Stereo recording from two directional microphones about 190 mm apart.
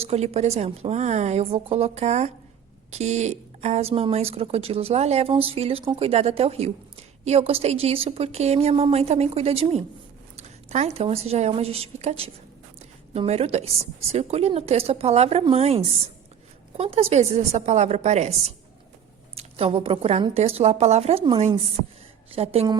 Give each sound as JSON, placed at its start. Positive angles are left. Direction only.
{"t": 0.0, "sound": "a woman's voice", "side_deg": -35}